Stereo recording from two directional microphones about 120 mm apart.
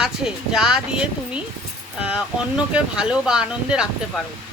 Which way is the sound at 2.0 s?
10° right (ahead or behind).